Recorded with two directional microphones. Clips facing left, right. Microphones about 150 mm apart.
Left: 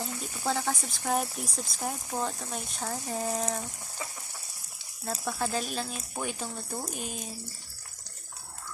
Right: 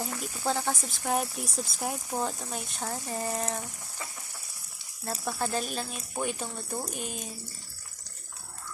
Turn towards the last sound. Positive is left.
turn(degrees=0)  # may be behind; listen again after turning